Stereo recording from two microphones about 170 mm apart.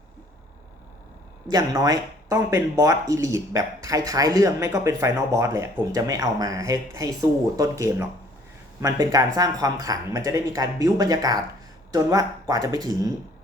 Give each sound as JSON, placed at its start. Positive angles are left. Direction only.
{"t": 1.5, "sound": "speech", "side_deg": -20}